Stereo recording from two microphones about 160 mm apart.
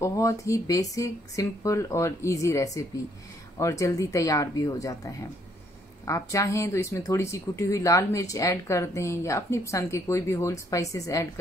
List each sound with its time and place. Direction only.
0.0 s speech: 20° left (ahead or behind)